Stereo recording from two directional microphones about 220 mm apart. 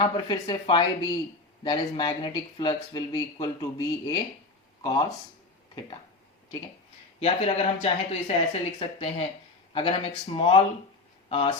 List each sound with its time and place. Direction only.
0.0 s speech: 20° left (ahead or behind)
7.2 s speech: 25° left (ahead or behind)